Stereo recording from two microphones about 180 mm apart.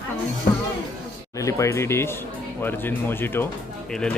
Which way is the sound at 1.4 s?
15° left (ahead or behind).